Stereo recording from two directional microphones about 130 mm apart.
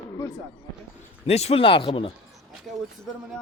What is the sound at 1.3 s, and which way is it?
Speech, 50° left (ahead or behind).